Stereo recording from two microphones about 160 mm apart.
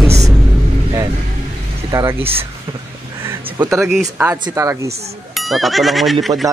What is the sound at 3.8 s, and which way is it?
Speech, centre (ahead or behind).